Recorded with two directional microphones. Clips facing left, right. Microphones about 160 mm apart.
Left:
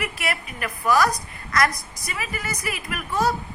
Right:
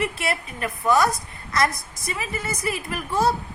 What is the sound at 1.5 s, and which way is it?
A woman's voice, 25° right (ahead or behind).